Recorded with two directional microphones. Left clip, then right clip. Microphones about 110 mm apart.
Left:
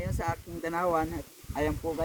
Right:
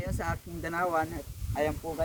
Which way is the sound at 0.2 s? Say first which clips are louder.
Left 3 dB; 30° right (ahead or behind).